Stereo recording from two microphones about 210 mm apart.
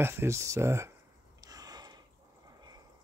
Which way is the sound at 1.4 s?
15° right (ahead or behind).